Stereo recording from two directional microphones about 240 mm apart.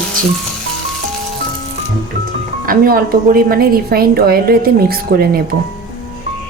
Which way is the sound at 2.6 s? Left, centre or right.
Right.